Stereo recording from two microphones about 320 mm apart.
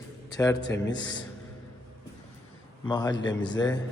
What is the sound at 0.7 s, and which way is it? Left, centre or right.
Speech, left.